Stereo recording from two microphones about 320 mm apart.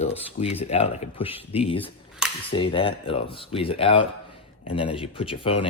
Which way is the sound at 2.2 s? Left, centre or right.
Centre.